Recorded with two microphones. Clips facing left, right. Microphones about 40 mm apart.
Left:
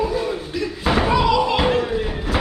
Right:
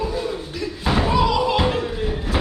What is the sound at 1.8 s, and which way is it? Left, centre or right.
Slam, left.